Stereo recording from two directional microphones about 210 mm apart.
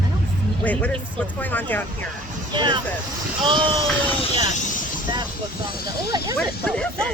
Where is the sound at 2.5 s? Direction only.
20° right (ahead or behind).